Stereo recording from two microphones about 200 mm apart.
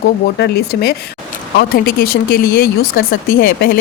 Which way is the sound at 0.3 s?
55° left (ahead or behind).